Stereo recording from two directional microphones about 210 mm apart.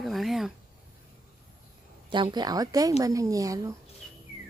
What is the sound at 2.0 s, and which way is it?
Speech, 20° right (ahead or behind).